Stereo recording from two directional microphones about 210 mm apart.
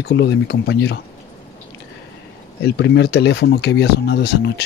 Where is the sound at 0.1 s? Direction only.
55° left (ahead or behind).